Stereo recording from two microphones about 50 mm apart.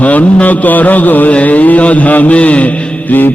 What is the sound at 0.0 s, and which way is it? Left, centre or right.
Mantra, left.